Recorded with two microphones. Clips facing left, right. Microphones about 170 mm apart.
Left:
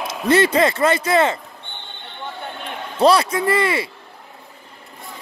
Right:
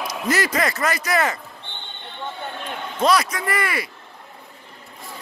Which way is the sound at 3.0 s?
30° left (ahead or behind).